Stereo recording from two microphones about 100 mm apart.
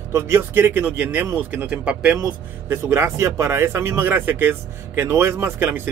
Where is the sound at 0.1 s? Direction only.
25° right (ahead or behind).